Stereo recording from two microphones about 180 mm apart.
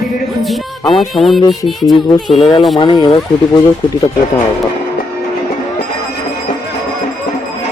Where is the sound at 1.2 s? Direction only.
Centre (ahead or behind).